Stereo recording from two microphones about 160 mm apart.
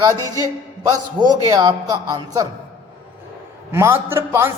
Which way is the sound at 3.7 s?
15° right (ahead or behind).